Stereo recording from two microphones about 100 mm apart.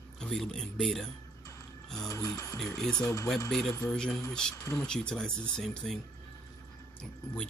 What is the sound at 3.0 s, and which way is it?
Speech, 30° left (ahead or behind).